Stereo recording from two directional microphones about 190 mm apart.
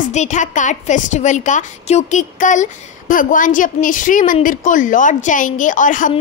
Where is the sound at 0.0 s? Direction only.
40° left (ahead or behind).